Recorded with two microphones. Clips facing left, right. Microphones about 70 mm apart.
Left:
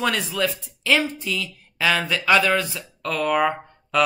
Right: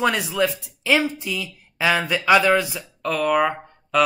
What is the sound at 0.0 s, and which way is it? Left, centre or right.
Speech, centre.